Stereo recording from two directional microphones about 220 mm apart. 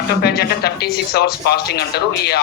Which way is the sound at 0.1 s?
45° left (ahead or behind).